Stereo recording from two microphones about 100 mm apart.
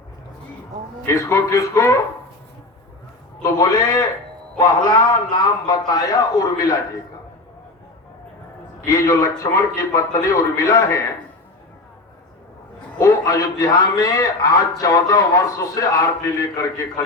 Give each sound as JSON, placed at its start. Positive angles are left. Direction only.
{"t": 1.0, "sound": "a man's voice", "side_deg": 30}
{"t": 3.4, "sound": "a man's voice", "side_deg": 40}
{"t": 8.9, "sound": "a man's voice", "side_deg": 35}
{"t": 13.0, "sound": "a man's voice", "side_deg": 35}